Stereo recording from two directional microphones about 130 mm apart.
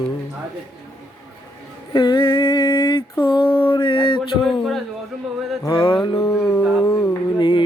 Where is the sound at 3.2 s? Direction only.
40° left (ahead or behind).